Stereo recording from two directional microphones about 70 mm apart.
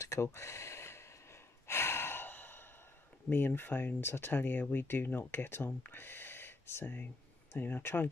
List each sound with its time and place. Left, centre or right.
0.0 s a sound: left
1.7 s gasp: left
3.3 s speech: left